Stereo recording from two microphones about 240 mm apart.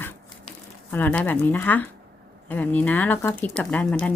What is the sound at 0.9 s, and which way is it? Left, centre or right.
Speech, centre.